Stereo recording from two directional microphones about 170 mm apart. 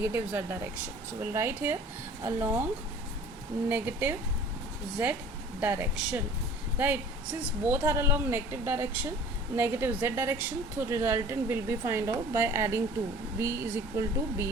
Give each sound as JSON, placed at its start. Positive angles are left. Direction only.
{"t": 0.0, "sound": "a woman's voice", "side_deg": -15}
{"t": 3.7, "sound": "a woman's voice", "side_deg": -10}
{"t": 5.5, "sound": "a woman's voice", "side_deg": -10}